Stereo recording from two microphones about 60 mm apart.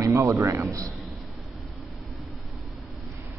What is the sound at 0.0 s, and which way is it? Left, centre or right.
Speech, right.